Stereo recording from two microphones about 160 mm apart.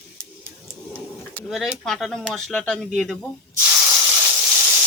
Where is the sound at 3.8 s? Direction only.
15° right (ahead or behind).